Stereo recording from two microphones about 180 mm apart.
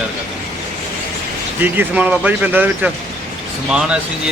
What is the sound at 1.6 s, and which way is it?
Speech, 10° right (ahead or behind).